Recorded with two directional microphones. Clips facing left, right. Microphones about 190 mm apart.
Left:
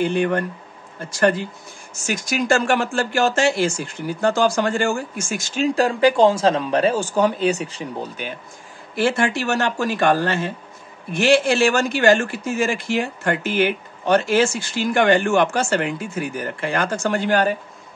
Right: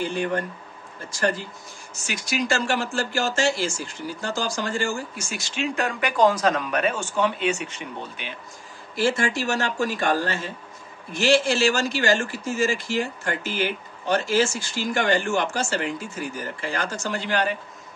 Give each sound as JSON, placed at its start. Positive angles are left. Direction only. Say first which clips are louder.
{"t": 0.0, "sound": "speech", "louder": "left 6 dB", "side_deg": 65}
{"t": 2.0, "sound": "speech", "louder": "left 5 dB", "side_deg": 45}
{"t": 8.9, "sound": "speech", "louder": "left 3 dB", "side_deg": 60}